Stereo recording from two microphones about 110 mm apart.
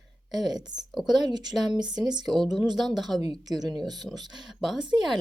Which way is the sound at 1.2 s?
40° right (ahead or behind).